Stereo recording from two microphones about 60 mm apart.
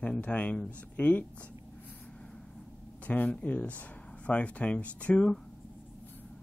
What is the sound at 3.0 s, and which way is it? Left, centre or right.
Speech, left.